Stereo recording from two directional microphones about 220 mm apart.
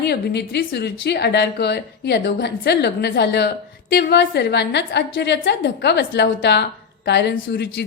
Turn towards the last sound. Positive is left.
turn(degrees=50)  # may be behind; listen again after turning